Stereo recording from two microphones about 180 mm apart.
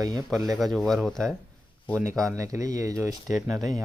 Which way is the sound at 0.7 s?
Centre (ahead or behind).